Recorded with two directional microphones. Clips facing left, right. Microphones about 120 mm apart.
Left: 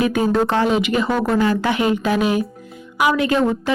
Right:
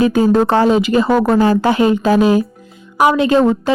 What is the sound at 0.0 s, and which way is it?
A woman's voice, 30° right (ahead or behind).